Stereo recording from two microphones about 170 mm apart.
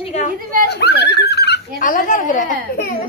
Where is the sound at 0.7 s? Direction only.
75° left (ahead or behind).